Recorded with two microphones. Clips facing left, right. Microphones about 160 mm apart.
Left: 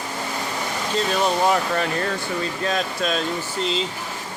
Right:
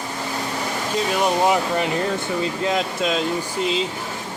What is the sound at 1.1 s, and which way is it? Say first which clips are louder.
Speech: right 1 dB; 15° right (ahead or behind).